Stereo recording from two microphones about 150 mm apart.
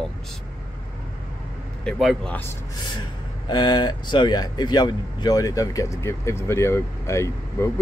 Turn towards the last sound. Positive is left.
turn(degrees=20)  # may be behind; listen again after turning